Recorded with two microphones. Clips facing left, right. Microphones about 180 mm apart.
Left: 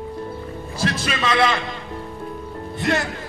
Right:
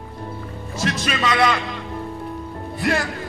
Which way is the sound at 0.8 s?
30° left (ahead or behind).